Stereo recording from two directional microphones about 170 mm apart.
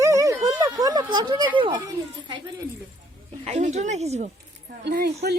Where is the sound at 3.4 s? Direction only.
40° right (ahead or behind).